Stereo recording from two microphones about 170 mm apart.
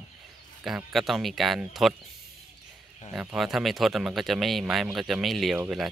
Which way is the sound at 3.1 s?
5° right (ahead or behind).